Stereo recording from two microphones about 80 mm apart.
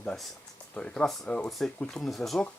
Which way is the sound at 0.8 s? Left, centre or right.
Centre.